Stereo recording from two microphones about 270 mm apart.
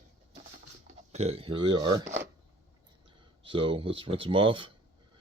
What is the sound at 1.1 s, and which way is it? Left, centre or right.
Speech, right.